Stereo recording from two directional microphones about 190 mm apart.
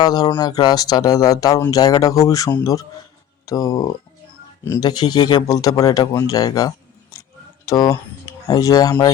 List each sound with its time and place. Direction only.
0.0 s speech: 20° left (ahead or behind)